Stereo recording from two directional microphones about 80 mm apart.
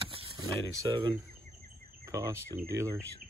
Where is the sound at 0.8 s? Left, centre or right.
Right.